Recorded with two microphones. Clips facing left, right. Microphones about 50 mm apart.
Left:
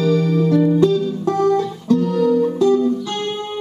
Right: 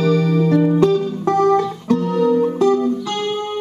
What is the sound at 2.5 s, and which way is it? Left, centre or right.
Music, right.